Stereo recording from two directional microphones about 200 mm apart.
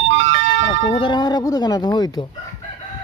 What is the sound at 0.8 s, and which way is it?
Speech, 30° left (ahead or behind).